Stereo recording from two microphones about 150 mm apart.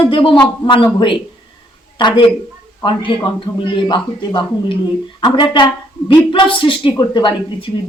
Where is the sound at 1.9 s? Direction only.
35° left (ahead or behind).